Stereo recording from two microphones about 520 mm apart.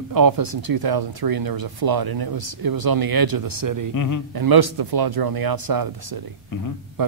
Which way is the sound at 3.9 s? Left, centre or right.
Left.